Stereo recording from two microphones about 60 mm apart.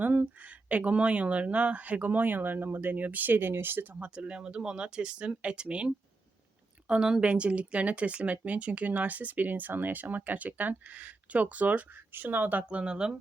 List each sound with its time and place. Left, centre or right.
0.0 s speech: right
3.9 s speech: right